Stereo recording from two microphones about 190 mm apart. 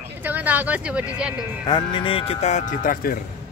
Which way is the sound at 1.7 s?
25° left (ahead or behind).